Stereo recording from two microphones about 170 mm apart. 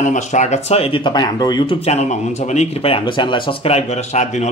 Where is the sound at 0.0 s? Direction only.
45° left (ahead or behind).